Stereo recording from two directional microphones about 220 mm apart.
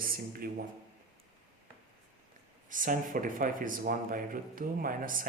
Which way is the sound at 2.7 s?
35° right (ahead or behind).